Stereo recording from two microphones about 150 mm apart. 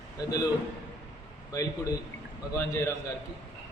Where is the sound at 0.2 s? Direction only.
25° left (ahead or behind).